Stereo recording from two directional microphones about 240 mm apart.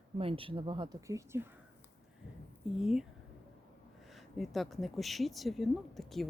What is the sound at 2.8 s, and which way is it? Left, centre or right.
Speech, centre.